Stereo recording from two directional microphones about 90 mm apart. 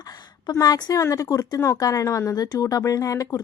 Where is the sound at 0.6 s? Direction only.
45° left (ahead or behind).